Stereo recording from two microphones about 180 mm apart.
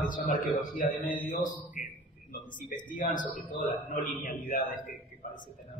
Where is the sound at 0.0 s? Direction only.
50° left (ahead or behind).